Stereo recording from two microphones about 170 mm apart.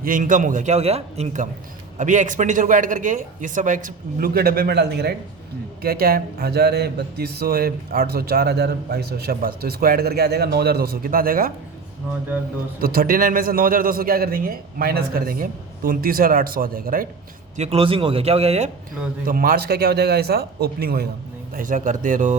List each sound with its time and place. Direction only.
0.0 s speech: 50° right (ahead or behind); by 5.1 s 70° right (ahead or behind)
5.8 s a man's voice: 60° right (ahead or behind)
12.8 s a man's voice: 60° right (ahead or behind)
17.6 s a man's voice: 35° right (ahead or behind)
19.2 s a man's voice: 55° right (ahead or behind)
21.5 s speech: 50° right (ahead or behind)